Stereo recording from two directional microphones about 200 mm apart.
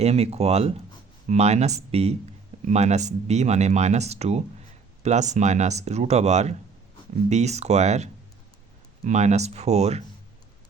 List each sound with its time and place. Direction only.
0.0 s speech: 30° right (ahead or behind)